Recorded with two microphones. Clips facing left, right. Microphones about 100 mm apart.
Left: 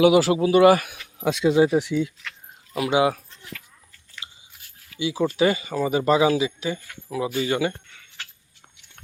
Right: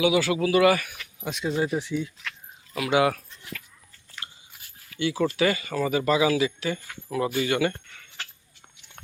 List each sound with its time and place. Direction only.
0.0 s speech: 40° left (ahead or behind)
0.9 s speech: 80° left
2.7 s speech: 25° left (ahead or behind)
4.2 s biting: 15° left (ahead or behind)
4.9 s speech: 10° left (ahead or behind)
5.4 s speech: 20° left (ahead or behind); by 7.4 s 5° left (ahead or behind)
7.4 s speech: 15° left (ahead or behind)